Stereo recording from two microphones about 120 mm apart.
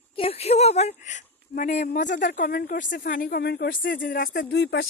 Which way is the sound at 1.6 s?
85° left.